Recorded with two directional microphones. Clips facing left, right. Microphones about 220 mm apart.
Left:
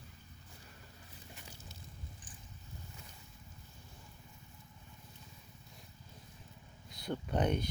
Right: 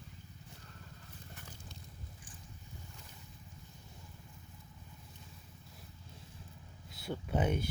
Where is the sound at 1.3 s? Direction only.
10° left (ahead or behind).